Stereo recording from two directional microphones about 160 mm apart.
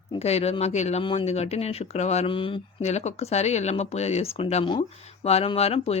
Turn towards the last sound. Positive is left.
turn(degrees=40)  # may be behind; listen again after turning